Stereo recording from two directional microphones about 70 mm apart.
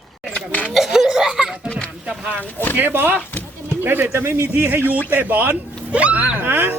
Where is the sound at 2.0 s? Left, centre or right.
Centre.